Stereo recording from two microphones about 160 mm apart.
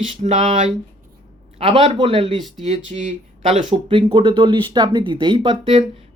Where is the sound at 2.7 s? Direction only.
45° right (ahead or behind).